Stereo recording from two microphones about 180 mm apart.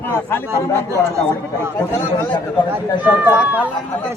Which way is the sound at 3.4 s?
10° right (ahead or behind).